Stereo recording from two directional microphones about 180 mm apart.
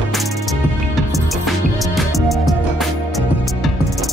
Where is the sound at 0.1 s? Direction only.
Centre (ahead or behind).